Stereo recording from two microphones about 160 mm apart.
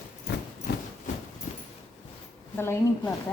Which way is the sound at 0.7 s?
65° left (ahead or behind).